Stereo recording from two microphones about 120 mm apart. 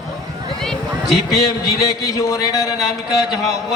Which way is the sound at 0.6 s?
Centre (ahead or behind).